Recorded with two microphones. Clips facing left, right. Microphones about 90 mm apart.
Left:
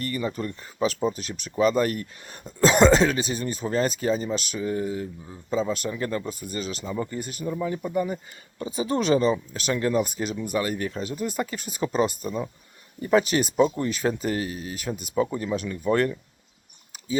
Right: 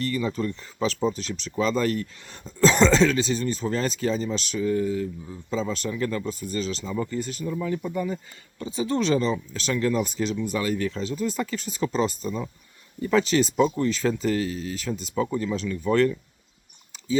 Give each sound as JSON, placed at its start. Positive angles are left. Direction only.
{"t": 0.8, "sound": "speech", "side_deg": 10}
{"t": 4.6, "sound": "speech", "side_deg": 25}
{"t": 5.5, "sound": "speech", "side_deg": 10}
{"t": 5.9, "sound": "speech", "side_deg": 25}
{"t": 6.5, "sound": "speech", "side_deg": 10}